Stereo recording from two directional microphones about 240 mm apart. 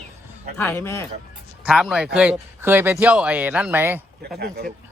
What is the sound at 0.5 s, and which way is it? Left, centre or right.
Speech, centre.